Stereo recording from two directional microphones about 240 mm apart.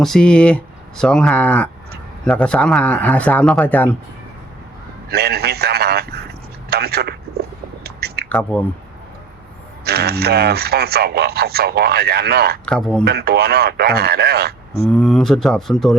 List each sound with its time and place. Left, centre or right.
0.0 s speech: centre
5.0 s a sound: right
8.3 s speech: centre
9.8 s speech: right
12.6 s speech: centre
13.1 s speech: right
14.8 s speech: centre